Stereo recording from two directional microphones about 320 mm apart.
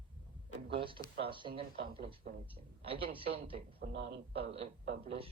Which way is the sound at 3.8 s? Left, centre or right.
Right.